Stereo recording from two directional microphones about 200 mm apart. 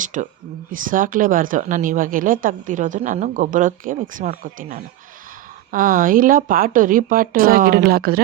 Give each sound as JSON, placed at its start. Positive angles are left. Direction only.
{"t": 0.0, "sound": "speech", "side_deg": -40}